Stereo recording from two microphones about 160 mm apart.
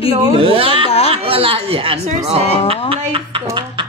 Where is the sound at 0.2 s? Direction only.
30° right (ahead or behind).